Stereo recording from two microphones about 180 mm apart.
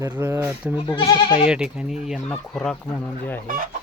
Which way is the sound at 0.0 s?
15° right (ahead or behind).